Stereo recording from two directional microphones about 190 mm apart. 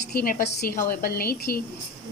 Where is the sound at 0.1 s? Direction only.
50° left (ahead or behind).